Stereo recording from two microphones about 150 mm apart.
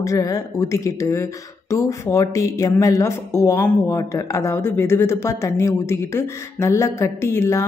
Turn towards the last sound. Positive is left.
turn(degrees=20)  # may be behind; listen again after turning